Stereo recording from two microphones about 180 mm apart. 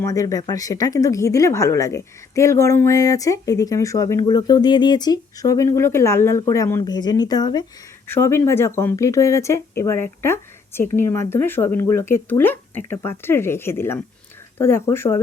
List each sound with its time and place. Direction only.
0.0 s speech: 20° left (ahead or behind)